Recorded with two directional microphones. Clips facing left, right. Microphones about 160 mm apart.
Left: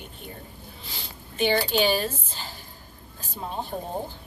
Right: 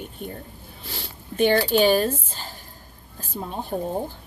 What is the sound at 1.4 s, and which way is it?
A woman's voice, 50° right (ahead or behind).